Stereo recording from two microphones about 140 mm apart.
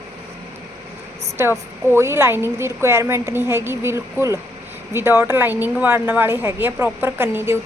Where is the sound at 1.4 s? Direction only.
15° right (ahead or behind).